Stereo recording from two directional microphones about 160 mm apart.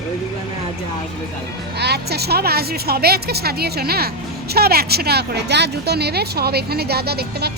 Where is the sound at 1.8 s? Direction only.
90° right.